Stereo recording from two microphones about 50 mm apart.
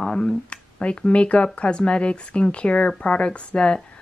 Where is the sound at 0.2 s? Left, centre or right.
Left.